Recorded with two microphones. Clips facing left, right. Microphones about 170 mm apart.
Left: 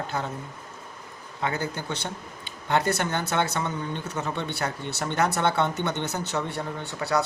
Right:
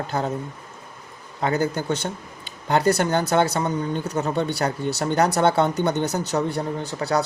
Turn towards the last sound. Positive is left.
turn(degrees=-35)  # may be behind; listen again after turning